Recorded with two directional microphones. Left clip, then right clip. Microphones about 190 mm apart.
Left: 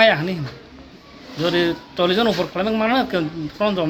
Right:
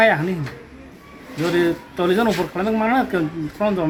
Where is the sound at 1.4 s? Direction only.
20° left (ahead or behind).